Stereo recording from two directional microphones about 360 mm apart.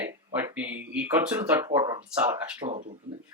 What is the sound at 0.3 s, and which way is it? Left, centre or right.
Speech, centre.